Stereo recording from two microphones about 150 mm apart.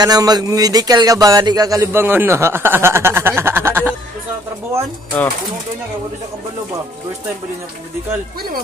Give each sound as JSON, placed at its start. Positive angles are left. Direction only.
{"t": 0.0, "sound": "speech", "side_deg": -25}